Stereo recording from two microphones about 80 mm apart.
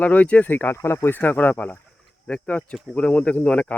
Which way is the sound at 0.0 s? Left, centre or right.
Centre.